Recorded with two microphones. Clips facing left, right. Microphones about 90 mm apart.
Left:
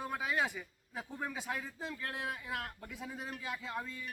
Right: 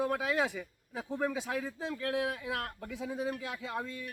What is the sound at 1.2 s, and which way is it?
Speech, 80° right.